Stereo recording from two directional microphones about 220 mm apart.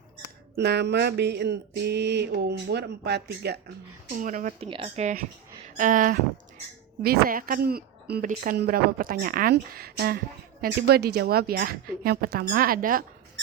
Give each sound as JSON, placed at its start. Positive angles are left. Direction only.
{"t": 0.6, "sound": "mantra", "side_deg": -50}
{"t": 4.1, "sound": "speech", "side_deg": -35}
{"t": 7.0, "sound": "mantra", "side_deg": -40}
{"t": 12.0, "sound": "speech", "side_deg": -45}